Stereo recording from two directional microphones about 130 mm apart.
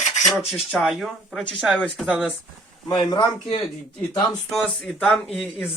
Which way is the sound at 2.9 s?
35° left (ahead or behind).